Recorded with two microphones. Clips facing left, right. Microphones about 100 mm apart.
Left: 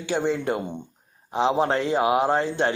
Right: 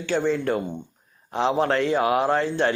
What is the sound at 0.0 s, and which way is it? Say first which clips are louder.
Speech: right 1 dB; 15° left (ahead or behind).